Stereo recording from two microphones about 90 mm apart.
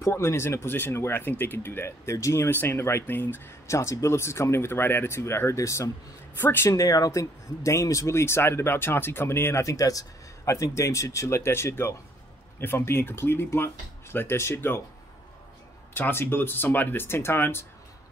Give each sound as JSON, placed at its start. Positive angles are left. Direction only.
{"t": 0.0, "sound": "speech", "side_deg": 30}
{"t": 6.7, "sound": "speech", "side_deg": 40}
{"t": 15.9, "sound": "speech", "side_deg": 25}